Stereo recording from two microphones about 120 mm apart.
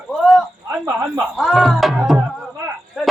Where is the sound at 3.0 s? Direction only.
Centre (ahead or behind).